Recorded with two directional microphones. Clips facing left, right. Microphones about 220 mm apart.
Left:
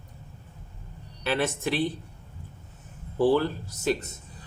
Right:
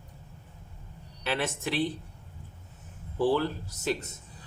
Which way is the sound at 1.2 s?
45° left (ahead or behind).